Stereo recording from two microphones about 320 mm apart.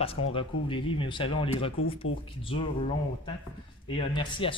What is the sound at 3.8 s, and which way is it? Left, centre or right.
Speech, centre.